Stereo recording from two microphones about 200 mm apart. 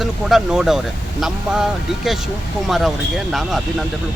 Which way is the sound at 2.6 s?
Centre (ahead or behind).